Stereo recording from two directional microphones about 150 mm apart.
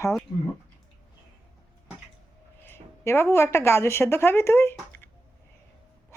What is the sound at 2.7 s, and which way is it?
A woman's voice, 15° left (ahead or behind).